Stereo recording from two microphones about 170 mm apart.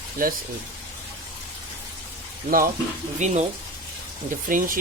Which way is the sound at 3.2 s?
45° right (ahead or behind).